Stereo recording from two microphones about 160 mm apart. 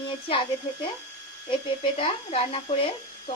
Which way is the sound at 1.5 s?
35° left (ahead or behind).